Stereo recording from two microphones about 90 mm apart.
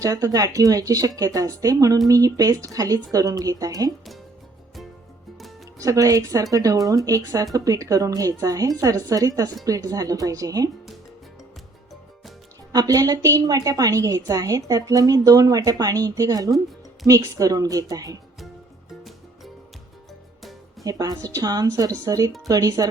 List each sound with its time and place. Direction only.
0.0 s speech: 40° right (ahead or behind)
5.8 s speech: 40° right (ahead or behind)
12.7 s a woman's voice: 40° right (ahead or behind)
20.8 s a woman's voice: 45° right (ahead or behind)